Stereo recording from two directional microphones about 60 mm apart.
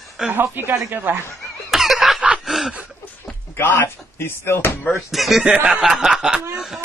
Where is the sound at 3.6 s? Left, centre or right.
Left.